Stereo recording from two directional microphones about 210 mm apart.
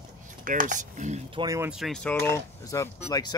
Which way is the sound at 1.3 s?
15° right (ahead or behind).